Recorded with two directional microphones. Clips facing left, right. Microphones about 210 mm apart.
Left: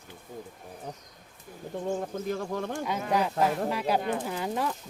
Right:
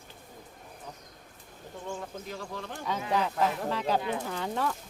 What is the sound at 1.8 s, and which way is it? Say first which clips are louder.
Speech: left 8 dB; 45° left (ahead or behind).